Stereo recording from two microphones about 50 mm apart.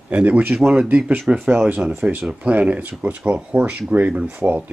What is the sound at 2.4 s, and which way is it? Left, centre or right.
Speech, right.